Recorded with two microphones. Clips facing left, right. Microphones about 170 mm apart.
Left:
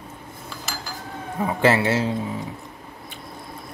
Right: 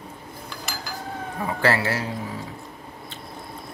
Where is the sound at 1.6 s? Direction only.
20° left (ahead or behind).